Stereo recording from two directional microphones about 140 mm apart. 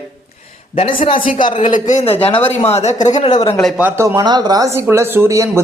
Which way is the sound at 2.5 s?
50° left (ahead or behind).